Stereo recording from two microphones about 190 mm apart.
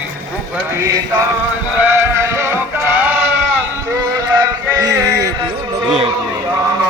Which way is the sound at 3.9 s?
20° right (ahead or behind).